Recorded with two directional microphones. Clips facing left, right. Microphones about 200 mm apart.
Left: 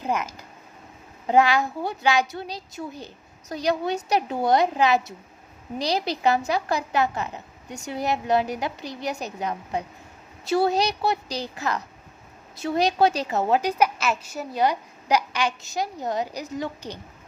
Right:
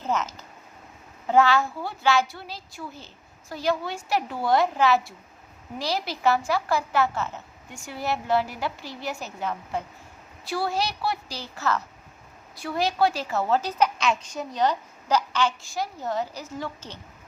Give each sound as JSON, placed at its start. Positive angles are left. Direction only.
{"t": 0.0, "sound": "a woman's voice", "side_deg": 10}